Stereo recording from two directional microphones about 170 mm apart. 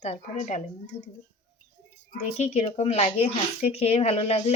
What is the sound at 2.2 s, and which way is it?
Speech, 40° left (ahead or behind).